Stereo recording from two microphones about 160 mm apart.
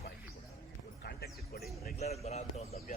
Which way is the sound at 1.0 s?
75° left (ahead or behind).